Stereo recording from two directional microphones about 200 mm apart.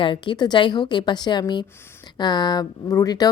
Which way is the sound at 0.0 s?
25° left (ahead or behind).